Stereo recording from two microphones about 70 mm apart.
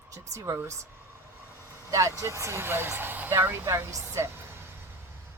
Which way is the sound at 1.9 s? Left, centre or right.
Right.